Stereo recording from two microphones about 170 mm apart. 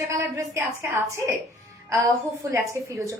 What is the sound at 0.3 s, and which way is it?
Speech, 15° right (ahead or behind).